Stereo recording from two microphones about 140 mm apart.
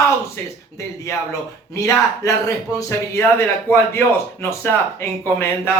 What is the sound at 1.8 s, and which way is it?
Speech, 25° left (ahead or behind).